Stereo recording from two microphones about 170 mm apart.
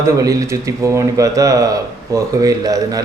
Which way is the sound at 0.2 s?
20° right (ahead or behind).